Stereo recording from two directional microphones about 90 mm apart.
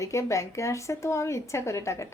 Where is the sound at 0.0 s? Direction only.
35° left (ahead or behind).